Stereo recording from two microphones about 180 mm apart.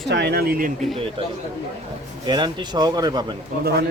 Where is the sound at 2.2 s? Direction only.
25° right (ahead or behind).